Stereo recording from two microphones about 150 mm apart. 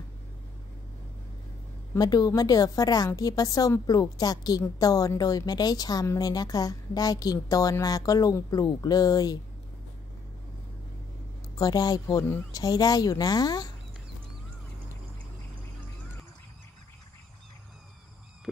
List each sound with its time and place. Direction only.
2.0 s a woman's voice: 25° left (ahead or behind)
11.5 s a woman's voice: 25° left (ahead or behind)